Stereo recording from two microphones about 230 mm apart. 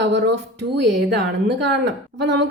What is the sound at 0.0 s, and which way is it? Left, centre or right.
A woman's voice, right.